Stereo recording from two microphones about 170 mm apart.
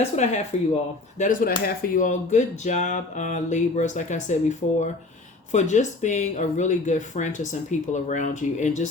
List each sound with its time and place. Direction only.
0.5 s speech: 40° left (ahead or behind)
1.2 s speech: 55° left (ahead or behind)